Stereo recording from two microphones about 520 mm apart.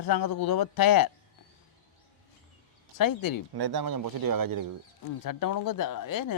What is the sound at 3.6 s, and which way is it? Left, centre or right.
Speech, right.